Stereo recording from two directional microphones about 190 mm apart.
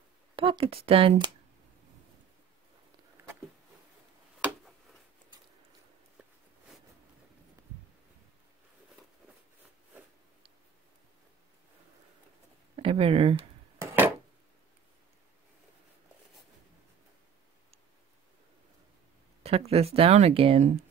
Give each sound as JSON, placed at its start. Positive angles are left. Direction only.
{"t": 0.4, "sound": "speech", "side_deg": -30}
{"t": 12.7, "sound": "speech", "side_deg": -30}
{"t": 13.7, "sound": "chopping", "side_deg": -10}
{"t": 19.4, "sound": "speech", "side_deg": -30}